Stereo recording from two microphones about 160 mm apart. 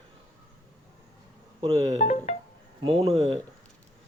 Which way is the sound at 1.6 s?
20° right (ahead or behind).